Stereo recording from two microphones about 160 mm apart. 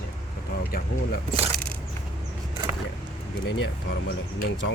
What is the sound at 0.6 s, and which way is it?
Speech, 65° left (ahead or behind).